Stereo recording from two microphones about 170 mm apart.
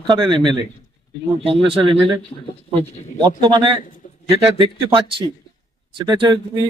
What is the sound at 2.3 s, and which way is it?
Speech, 30° left (ahead or behind).